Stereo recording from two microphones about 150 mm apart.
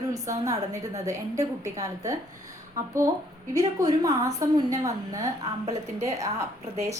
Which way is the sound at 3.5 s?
25° right (ahead or behind).